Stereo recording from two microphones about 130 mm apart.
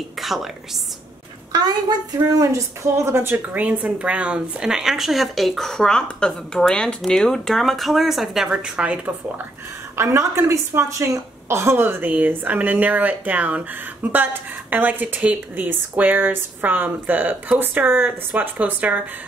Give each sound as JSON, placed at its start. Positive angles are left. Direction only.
{"t": 0.2, "sound": "a sound", "side_deg": 0}
{"t": 1.5, "sound": "a woman's voice", "side_deg": -30}
{"t": 9.9, "sound": "a woman's voice", "side_deg": -20}